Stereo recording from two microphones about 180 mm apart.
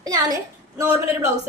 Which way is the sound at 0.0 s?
20° right (ahead or behind).